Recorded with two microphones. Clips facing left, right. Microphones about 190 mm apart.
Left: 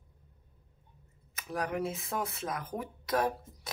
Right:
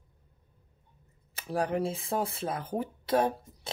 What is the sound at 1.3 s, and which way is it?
Speech, 30° right (ahead or behind).